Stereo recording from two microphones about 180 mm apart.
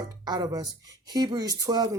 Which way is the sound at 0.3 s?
20° right (ahead or behind).